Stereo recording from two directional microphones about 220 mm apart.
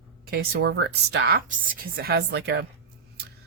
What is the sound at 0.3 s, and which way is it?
Speech, 45° right (ahead or behind).